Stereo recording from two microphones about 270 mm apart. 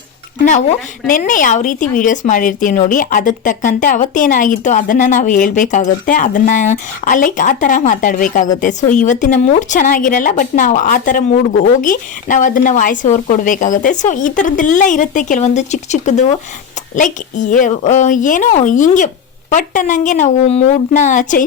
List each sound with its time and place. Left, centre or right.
0.4 s speech: left